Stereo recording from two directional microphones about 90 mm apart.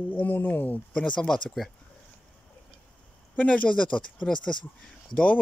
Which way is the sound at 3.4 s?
15° left (ahead or behind).